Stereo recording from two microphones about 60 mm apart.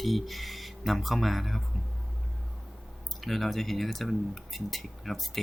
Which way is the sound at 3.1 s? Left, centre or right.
Centre.